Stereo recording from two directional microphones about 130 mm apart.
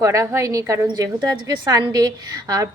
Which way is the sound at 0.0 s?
25° right (ahead or behind).